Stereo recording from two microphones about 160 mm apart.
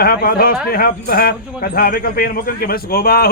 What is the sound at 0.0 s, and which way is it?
Speech, 70° left (ahead or behind).